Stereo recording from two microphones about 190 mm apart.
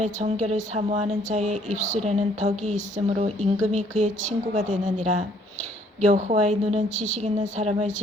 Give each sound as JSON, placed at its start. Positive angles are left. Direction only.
{"t": 0.0, "sound": "speech", "side_deg": -35}